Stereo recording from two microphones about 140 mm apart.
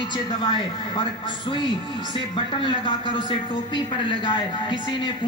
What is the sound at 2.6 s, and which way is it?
A woman's voice, 35° left (ahead or behind).